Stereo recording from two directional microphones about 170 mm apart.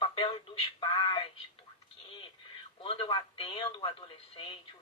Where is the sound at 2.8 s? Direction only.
35° left (ahead or behind).